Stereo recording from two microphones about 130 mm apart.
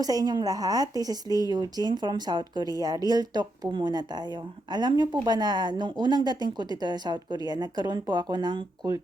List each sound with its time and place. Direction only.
0.0 s a woman's voice: 30° right (ahead or behind)